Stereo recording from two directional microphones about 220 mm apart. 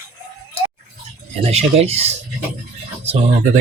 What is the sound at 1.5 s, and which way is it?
Speech, 30° right (ahead or behind).